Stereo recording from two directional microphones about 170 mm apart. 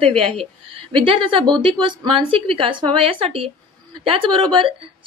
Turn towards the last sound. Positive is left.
turn(degrees=-30)  # may be behind; listen again after turning